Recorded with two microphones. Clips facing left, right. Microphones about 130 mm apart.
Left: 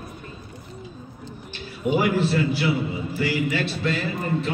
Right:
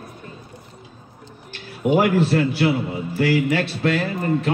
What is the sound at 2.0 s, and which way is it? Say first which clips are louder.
A man's voice: right 3 dB; 60° right (ahead or behind).